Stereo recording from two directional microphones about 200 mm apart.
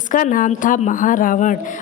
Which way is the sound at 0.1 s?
40° left (ahead or behind).